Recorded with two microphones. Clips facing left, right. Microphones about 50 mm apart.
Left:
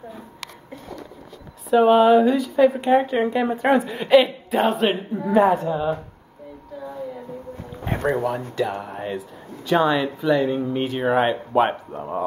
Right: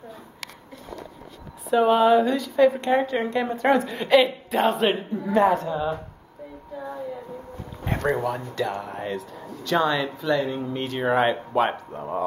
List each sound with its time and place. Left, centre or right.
1.7 s a woman's voice: centre
7.8 s a woman's voice: centre